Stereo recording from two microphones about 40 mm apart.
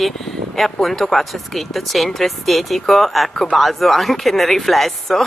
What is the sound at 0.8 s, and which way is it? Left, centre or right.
Speech, centre.